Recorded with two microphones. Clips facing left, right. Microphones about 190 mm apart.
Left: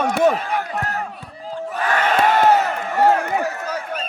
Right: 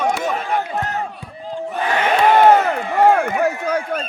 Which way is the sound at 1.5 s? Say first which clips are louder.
Right 1 dB; 15° right (ahead or behind).